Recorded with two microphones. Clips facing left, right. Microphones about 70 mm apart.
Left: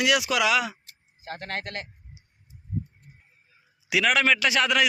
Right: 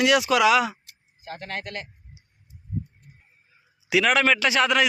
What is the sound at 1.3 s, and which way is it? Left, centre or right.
Speech, left.